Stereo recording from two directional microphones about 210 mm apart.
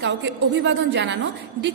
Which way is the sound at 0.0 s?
60° right (ahead or behind).